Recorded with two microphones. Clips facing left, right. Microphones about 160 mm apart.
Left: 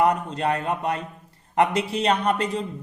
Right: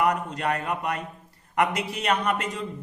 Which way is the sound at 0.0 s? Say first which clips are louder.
Left 3 dB; 30° left (ahead or behind).